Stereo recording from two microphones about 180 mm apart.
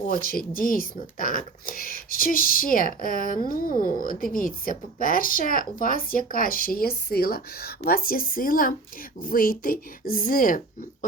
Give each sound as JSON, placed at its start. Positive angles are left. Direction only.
{"t": 0.0, "sound": "speech", "side_deg": 55}